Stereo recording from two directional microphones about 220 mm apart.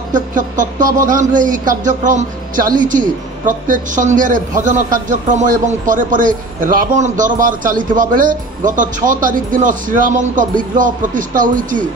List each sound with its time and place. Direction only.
0.1 s a man's voice: 35° right (ahead or behind)